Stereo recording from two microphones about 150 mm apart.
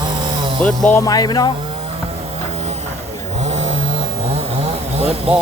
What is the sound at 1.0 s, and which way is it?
Speech, 25° left (ahead or behind).